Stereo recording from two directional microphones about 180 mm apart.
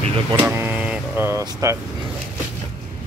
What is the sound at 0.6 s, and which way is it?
Vehicle, 10° right (ahead or behind).